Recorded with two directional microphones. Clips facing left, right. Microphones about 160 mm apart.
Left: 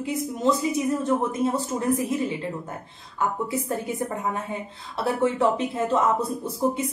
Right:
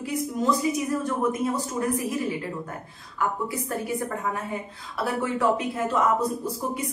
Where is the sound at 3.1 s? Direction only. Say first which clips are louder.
Left 2 dB; 25° left (ahead or behind).